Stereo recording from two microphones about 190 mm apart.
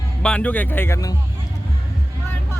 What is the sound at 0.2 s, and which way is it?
Speech, 5° left (ahead or behind).